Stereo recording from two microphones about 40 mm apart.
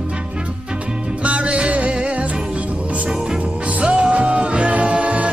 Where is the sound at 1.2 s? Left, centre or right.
Right.